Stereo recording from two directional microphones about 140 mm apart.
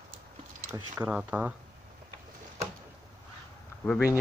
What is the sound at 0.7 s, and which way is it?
Speech, 10° right (ahead or behind).